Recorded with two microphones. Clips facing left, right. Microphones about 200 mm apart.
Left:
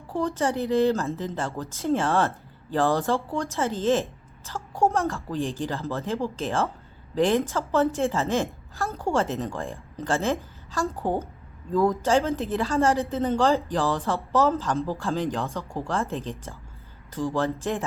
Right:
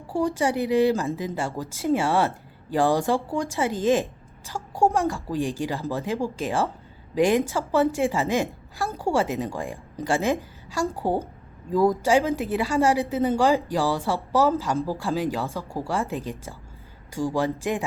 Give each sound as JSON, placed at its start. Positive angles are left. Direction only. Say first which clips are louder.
{"t": 0.1, "sound": "a woman's voice", "louder": "right 2 dB", "side_deg": -10}